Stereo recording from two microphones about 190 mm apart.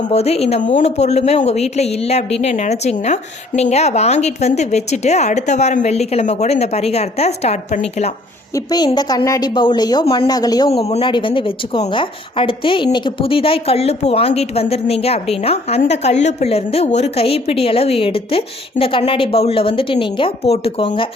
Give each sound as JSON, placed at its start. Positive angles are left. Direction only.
{"t": 0.0, "sound": "a woman's voice", "side_deg": 35}
{"t": 8.5, "sound": "a woman's voice", "side_deg": 20}